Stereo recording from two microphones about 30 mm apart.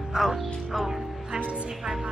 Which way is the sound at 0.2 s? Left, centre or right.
Right.